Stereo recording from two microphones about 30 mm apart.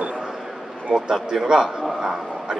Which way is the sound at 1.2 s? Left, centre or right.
Right.